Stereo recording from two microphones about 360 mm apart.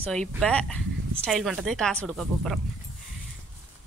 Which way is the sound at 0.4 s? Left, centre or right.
Centre.